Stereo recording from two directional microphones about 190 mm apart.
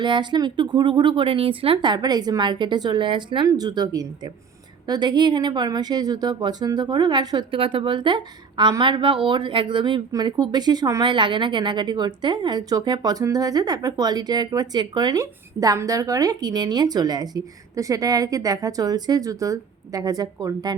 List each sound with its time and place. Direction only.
0.0 s speech: 25° right (ahead or behind)